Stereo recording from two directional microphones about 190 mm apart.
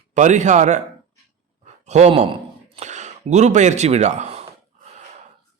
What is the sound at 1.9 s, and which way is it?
A man's voice, 35° right (ahead or behind).